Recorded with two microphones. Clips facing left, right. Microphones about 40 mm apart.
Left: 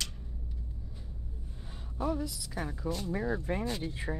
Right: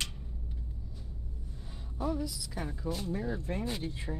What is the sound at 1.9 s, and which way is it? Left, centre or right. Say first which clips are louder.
Speech: left 1 dB; centre.